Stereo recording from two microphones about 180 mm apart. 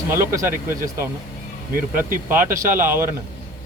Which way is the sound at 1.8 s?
50° right (ahead or behind).